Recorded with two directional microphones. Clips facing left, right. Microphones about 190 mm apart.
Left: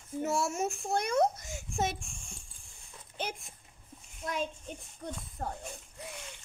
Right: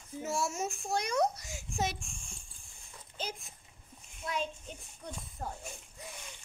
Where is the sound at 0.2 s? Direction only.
60° left (ahead or behind).